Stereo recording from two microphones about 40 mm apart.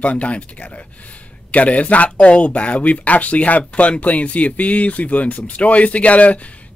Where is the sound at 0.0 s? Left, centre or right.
Left.